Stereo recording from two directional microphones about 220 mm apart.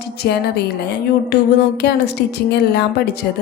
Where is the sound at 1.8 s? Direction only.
50° left (ahead or behind).